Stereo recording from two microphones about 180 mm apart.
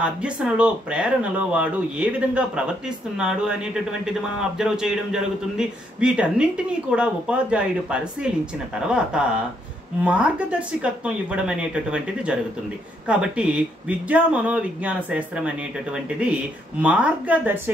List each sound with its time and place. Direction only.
0.0 s a man's voice: 5° right (ahead or behind)